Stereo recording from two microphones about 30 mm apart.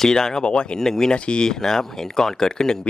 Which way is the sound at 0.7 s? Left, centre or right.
Centre.